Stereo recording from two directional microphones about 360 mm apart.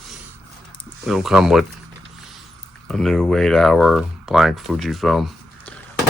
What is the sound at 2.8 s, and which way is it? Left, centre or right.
Speech, centre.